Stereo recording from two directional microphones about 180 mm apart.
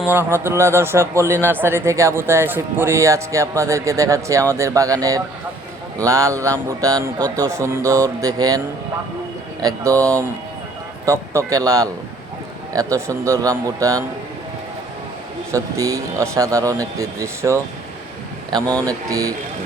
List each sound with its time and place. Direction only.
0.3 s speech: 15° right (ahead or behind)
15.5 s speech: 15° right (ahead or behind)
18.9 s speech: 20° right (ahead or behind)